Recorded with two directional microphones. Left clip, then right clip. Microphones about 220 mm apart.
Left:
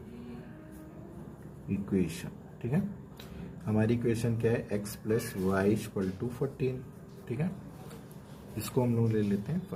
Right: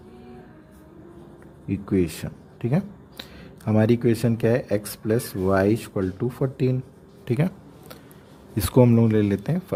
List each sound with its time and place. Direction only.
1.9 s speech: 45° right (ahead or behind)
8.7 s speech: 50° right (ahead or behind)